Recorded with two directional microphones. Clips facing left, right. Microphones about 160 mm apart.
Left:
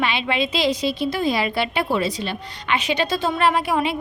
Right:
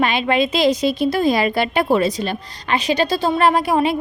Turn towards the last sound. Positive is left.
turn(degrees=-40)  # may be behind; listen again after turning